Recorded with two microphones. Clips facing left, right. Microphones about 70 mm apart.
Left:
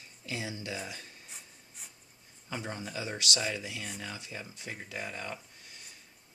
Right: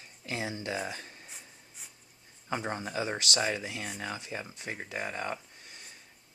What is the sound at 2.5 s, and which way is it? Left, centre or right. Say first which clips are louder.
Speech: right 5 dB; right.